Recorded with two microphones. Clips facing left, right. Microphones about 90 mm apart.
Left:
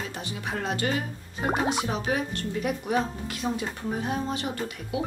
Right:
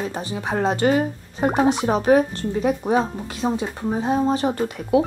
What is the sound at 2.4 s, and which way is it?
Speech, 30° right (ahead or behind).